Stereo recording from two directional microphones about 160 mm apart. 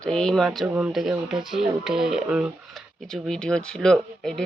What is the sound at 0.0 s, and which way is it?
Speech, 5° left (ahead or behind).